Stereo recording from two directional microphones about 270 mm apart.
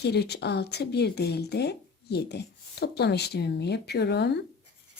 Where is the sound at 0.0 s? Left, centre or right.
Left.